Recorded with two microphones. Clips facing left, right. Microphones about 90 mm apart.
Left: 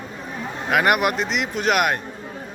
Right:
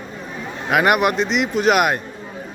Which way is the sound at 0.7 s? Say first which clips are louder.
Right 3 dB; centre (ahead or behind).